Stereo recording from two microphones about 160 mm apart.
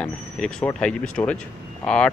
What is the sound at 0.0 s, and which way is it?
Speech, 10° left (ahead or behind).